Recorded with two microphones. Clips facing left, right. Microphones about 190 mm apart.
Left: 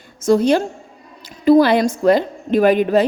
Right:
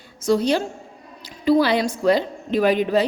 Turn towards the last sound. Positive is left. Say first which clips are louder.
# left 5 dB
turn(degrees=50)  # may be behind; listen again after turning